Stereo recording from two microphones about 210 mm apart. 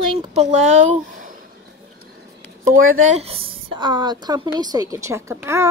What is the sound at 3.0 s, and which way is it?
A woman's voice, 30° right (ahead or behind).